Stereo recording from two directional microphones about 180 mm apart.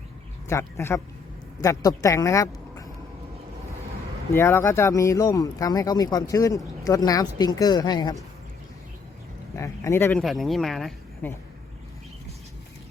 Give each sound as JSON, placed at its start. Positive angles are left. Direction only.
{"t": 0.4, "sound": "speech", "side_deg": 15}
{"t": 4.4, "sound": "speech", "side_deg": 15}
{"t": 9.6, "sound": "speech", "side_deg": 15}
{"t": 10.2, "sound": "speech", "side_deg": 0}